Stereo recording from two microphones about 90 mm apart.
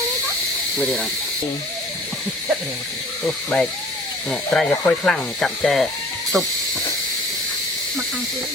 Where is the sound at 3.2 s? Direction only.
5° left (ahead or behind).